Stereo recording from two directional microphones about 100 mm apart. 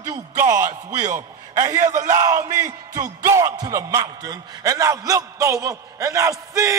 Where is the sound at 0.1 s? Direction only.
30° right (ahead or behind).